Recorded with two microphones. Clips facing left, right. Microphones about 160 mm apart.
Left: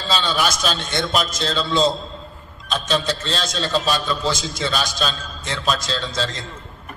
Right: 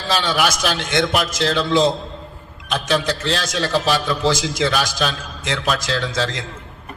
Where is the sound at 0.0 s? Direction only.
65° right (ahead or behind).